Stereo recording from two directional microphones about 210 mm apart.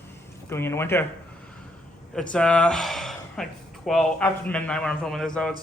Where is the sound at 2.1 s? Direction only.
5° left (ahead or behind).